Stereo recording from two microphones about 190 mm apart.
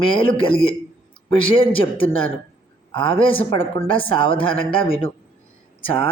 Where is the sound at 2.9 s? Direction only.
25° left (ahead or behind).